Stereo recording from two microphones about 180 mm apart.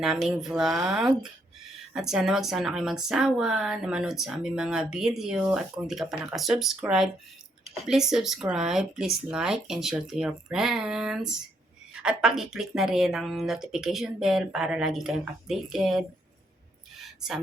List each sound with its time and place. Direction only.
0.0 s speech: centre (ahead or behind)